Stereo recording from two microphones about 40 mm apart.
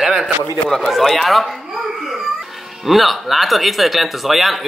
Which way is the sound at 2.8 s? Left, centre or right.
Centre.